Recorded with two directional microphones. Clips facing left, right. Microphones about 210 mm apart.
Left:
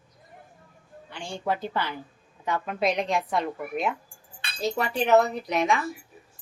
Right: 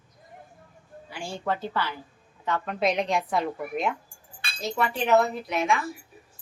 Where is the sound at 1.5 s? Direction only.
15° left (ahead or behind).